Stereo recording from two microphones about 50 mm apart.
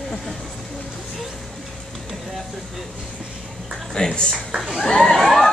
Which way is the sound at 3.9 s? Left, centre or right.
Centre.